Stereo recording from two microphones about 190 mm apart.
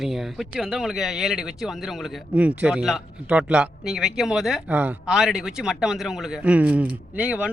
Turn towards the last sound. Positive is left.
turn(degrees=-5)  # may be behind; listen again after turning